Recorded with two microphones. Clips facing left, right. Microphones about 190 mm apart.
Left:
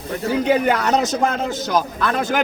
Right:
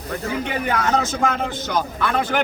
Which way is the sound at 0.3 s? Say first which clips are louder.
Left 8 dB; 40° left (ahead or behind).